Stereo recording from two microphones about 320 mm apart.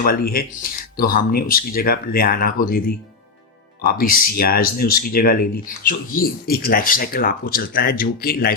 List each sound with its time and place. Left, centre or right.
0.0 s speech: left